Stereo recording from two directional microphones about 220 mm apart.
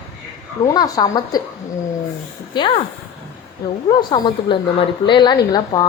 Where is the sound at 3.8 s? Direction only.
20° left (ahead or behind).